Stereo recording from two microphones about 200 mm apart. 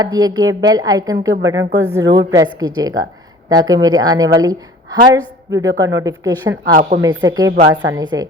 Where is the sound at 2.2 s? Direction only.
20° right (ahead or behind).